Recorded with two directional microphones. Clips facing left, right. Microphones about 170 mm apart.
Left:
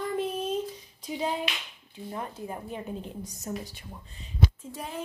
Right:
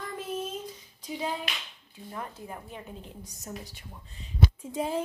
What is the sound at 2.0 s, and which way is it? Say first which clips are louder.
Speech: left 3 dB; 20° left (ahead or behind).